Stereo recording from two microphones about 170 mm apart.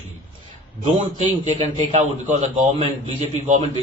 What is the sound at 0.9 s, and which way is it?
A man's voice, 40° right (ahead or behind).